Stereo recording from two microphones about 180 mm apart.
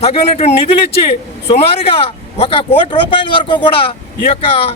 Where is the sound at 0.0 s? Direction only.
35° left (ahead or behind).